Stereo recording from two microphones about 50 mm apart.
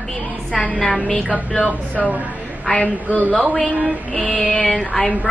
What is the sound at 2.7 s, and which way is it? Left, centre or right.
A woman's voice, left.